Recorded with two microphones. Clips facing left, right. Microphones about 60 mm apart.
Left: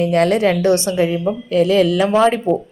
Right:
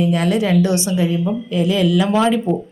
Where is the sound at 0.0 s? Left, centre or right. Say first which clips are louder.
Left 3 dB; left.